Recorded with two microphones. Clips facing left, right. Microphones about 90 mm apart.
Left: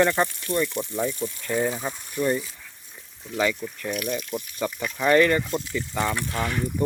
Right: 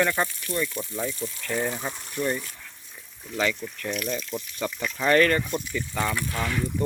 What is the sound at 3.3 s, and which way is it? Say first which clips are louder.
Speech: left 2 dB; 10° left (ahead or behind).